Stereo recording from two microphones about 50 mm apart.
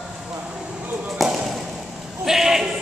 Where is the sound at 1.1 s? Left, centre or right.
Centre.